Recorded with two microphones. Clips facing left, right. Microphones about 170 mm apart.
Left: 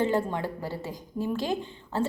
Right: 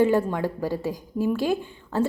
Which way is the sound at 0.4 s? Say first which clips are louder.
Right 7 dB; 15° right (ahead or behind).